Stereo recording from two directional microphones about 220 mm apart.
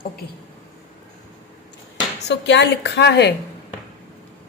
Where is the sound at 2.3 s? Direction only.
50° left (ahead or behind).